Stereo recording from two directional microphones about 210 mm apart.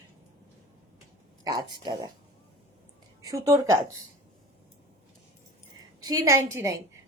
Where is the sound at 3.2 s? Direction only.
15° right (ahead or behind).